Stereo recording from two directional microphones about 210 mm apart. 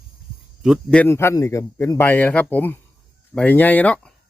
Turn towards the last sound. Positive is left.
turn(degrees=5)  # may be behind; listen again after turning